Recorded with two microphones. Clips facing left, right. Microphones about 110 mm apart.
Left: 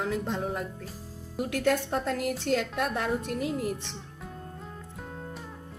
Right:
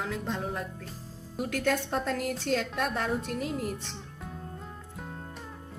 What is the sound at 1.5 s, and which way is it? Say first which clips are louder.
Speech: left 2 dB; 15° left (ahead or behind).